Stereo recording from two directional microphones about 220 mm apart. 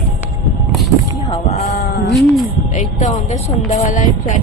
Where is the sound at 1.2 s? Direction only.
25° left (ahead or behind).